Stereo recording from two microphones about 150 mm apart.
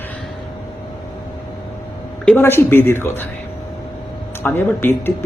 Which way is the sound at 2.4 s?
15° left (ahead or behind).